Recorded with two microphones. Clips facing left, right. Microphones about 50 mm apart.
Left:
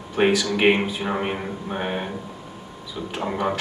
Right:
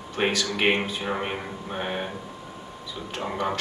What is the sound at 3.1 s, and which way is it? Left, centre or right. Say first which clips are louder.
Speech: left 3 dB; centre.